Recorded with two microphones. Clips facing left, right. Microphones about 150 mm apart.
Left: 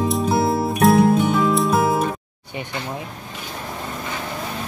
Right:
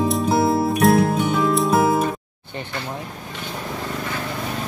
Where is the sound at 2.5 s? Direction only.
15° left (ahead or behind).